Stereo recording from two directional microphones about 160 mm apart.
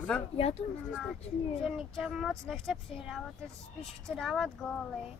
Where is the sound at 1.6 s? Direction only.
Centre (ahead or behind).